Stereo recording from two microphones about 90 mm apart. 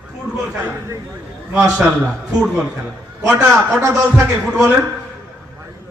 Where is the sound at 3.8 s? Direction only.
35° right (ahead or behind).